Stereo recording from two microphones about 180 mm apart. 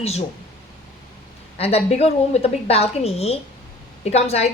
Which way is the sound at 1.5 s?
35° left (ahead or behind).